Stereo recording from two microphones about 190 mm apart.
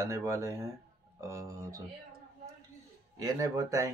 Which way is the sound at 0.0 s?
15° right (ahead or behind).